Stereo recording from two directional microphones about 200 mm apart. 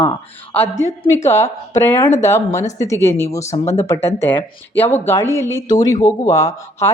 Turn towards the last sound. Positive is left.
turn(degrees=15)  # may be behind; listen again after turning